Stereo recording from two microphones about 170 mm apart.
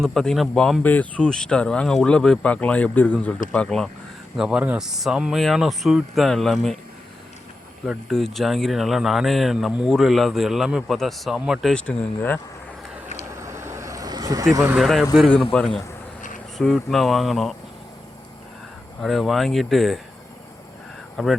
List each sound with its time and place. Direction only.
0.0 s speech: 5° left (ahead or behind)
7.9 s speech: centre (ahead or behind)
13.3 s vehicle: 15° right (ahead or behind)
14.8 s speech: centre (ahead or behind)
19.0 s speech: centre (ahead or behind)
21.2 s speech: centre (ahead or behind)